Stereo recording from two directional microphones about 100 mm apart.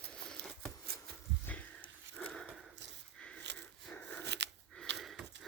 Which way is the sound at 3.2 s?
10° left (ahead or behind).